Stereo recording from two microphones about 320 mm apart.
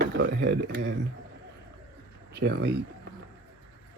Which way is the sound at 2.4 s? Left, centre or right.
Right.